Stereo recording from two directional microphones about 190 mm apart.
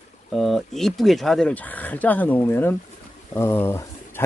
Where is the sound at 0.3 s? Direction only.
Centre (ahead or behind).